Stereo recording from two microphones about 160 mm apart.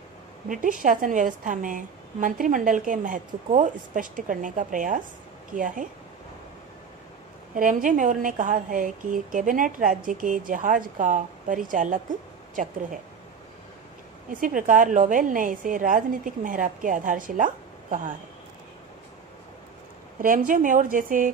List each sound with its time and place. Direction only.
0.5 s a woman's voice: 55° right (ahead or behind)
7.5 s a woman's voice: 55° right (ahead or behind)
14.4 s a woman's voice: 55° right (ahead or behind)
20.2 s a woman's voice: 55° right (ahead or behind)